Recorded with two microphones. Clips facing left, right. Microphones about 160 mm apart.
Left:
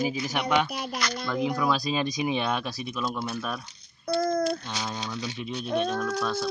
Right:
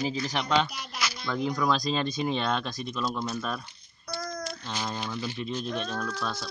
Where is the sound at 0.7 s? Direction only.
55° left (ahead or behind).